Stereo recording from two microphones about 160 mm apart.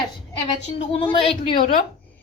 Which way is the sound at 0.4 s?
35° left (ahead or behind).